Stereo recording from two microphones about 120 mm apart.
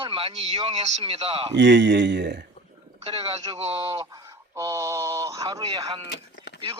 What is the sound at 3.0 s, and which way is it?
Speech, 55° right (ahead or behind).